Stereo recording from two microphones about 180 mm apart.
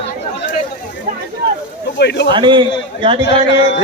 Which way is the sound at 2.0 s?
70° left (ahead or behind).